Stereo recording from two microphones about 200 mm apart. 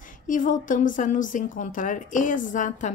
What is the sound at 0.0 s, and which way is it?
Speech, 40° left (ahead or behind).